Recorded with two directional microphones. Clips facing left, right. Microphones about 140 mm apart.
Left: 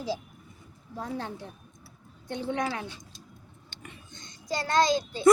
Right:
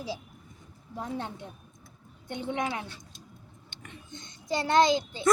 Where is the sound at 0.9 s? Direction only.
20° right (ahead or behind).